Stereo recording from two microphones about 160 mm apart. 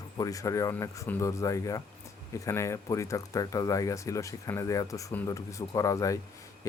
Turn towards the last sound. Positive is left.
turn(degrees=20)  # may be behind; listen again after turning